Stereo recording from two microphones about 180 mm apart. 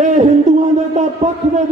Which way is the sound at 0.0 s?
40° right (ahead or behind).